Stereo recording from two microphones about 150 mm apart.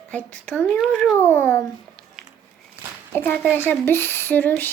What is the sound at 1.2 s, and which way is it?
Speech, 15° left (ahead or behind).